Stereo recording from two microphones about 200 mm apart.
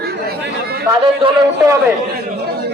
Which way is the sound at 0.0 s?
50° right (ahead or behind).